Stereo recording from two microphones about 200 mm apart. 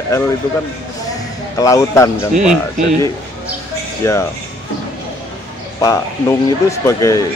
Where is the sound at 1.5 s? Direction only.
15° left (ahead or behind).